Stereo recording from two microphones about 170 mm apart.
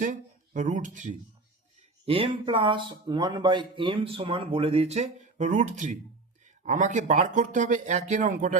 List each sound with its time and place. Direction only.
0.0 s speech: 45° right (ahead or behind)
2.0 s speech: 35° right (ahead or behind); by 8.5 s 50° right (ahead or behind)